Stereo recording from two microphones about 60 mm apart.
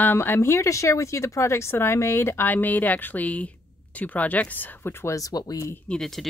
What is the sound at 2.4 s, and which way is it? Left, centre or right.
Speech, left.